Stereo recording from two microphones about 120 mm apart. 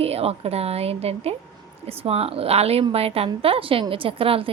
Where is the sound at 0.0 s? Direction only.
55° right (ahead or behind).